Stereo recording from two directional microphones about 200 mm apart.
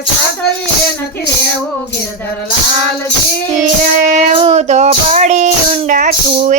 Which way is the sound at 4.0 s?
35° right (ahead or behind).